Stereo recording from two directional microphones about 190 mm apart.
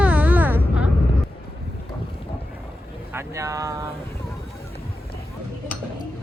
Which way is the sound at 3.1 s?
15° right (ahead or behind).